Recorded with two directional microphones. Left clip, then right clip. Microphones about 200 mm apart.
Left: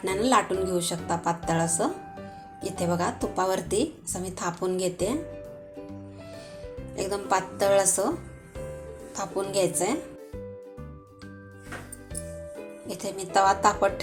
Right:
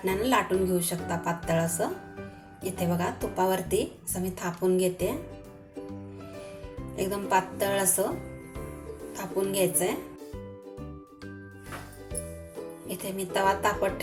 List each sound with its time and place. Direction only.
0.0 s a woman's voice: 30° left (ahead or behind)
6.9 s a woman's voice: 30° left (ahead or behind)
9.1 s a woman's voice: 25° left (ahead or behind)
12.9 s a woman's voice: 20° left (ahead or behind)